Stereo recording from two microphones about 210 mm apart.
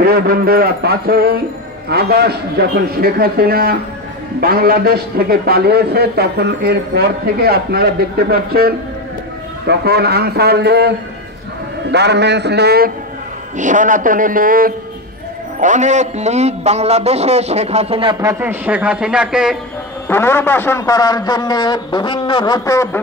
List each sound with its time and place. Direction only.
0.0 s a man's voice: 45° right (ahead or behind)
13.6 s a man's voice: 35° right (ahead or behind)
18.2 s speech: 10° right (ahead or behind)
20.1 s speech: 10° left (ahead or behind)